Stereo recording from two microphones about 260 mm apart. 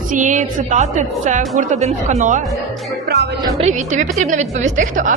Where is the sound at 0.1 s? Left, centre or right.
Right.